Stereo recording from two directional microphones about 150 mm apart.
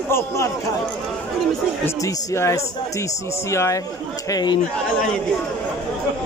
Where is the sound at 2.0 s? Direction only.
20° left (ahead or behind).